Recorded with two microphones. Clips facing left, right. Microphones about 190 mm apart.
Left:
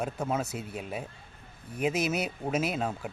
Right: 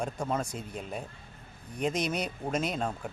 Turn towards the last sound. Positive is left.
turn(degrees=5)  # may be behind; listen again after turning